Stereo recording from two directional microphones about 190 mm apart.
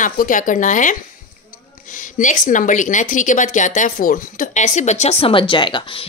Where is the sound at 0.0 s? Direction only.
45° left (ahead or behind).